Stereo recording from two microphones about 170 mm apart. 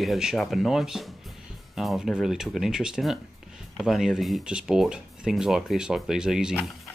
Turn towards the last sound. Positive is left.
turn(degrees=-5)  # may be behind; listen again after turning